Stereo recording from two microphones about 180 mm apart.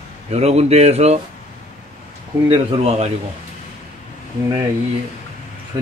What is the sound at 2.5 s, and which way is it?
Speech, 30° right (ahead or behind).